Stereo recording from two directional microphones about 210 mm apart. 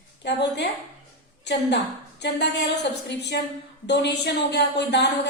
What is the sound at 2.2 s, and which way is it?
Speech, 55° left (ahead or behind).